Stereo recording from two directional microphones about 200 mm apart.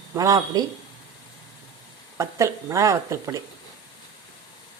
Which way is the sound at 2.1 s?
15° right (ahead or behind).